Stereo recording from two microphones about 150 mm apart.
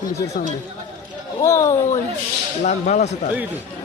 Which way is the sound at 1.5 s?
20° left (ahead or behind).